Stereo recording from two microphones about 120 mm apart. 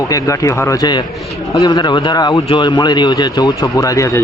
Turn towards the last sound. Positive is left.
turn(degrees=25)  # may be behind; listen again after turning